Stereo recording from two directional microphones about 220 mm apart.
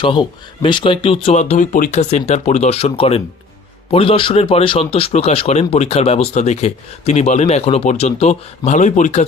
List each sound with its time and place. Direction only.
0.0 s speech: 20° left (ahead or behind)